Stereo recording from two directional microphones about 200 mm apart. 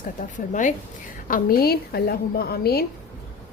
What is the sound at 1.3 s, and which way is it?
A woman's voice, 50° left (ahead or behind).